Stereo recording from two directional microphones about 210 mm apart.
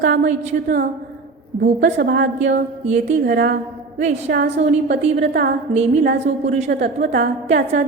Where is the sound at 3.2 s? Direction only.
50° right (ahead or behind).